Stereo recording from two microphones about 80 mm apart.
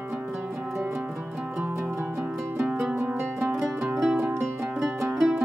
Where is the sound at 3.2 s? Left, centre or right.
Right.